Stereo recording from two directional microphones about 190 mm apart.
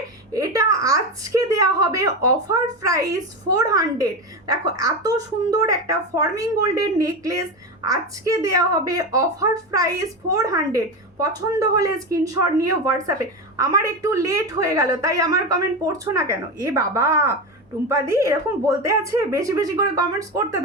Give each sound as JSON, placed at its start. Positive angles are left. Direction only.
{"t": 0.3, "sound": "speech", "side_deg": -20}